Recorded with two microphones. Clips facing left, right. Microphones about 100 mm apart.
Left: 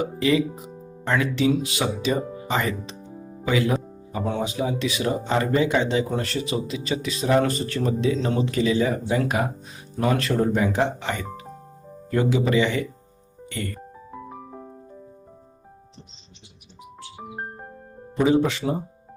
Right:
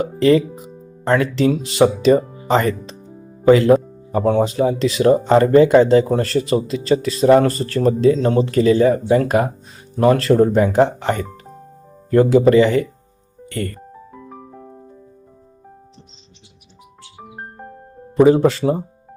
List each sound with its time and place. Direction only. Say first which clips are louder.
0.2 s speech: right 8 dB; 45° right (ahead or behind)
1.5 s speech: right 8 dB; 35° right (ahead or behind)
3.4 s speech: right 12 dB; 50° right (ahead or behind)
18.3 s speech: right 4 dB; 45° right (ahead or behind)